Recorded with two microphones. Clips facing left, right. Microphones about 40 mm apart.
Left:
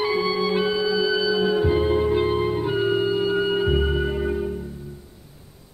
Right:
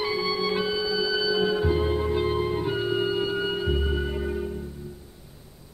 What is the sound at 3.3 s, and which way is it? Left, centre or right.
Music, centre.